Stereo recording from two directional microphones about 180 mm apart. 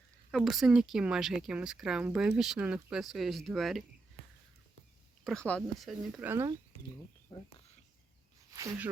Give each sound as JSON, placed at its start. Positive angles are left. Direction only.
{"t": 0.3, "sound": "speech", "side_deg": 0}
{"t": 5.2, "sound": "speech", "side_deg": 5}
{"t": 7.3, "sound": "speech", "side_deg": 25}
{"t": 8.5, "sound": "speech", "side_deg": -15}